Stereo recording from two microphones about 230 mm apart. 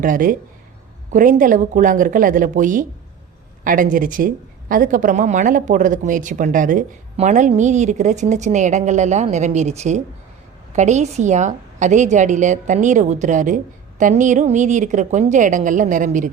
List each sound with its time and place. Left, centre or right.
0.0 s a woman's voice: right